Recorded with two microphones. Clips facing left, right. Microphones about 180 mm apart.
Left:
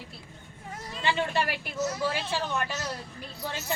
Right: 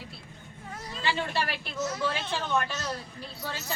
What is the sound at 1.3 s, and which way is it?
Speech, 15° left (ahead or behind).